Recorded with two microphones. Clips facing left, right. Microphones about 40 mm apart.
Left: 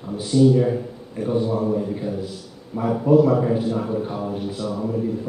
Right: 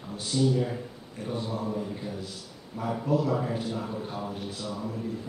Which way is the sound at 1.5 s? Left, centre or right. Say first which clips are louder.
Left 10 dB; left.